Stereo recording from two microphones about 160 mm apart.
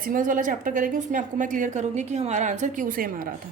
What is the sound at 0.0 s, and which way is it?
A woman's voice, 60° right (ahead or behind).